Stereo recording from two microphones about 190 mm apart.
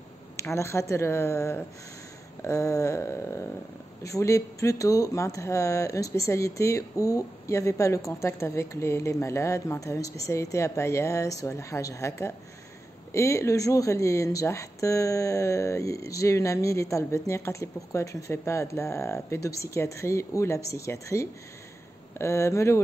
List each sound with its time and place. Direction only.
0.4 s speech: 15° left (ahead or behind)